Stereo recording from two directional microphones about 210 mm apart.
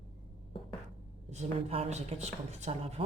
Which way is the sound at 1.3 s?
30° right (ahead or behind).